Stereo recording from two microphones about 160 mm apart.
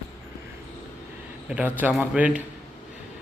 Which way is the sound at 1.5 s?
10° right (ahead or behind).